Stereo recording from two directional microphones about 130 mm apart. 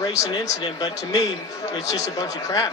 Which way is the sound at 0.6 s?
35° left (ahead or behind).